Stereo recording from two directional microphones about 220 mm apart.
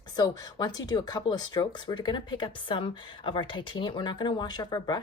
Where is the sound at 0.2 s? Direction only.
15° left (ahead or behind).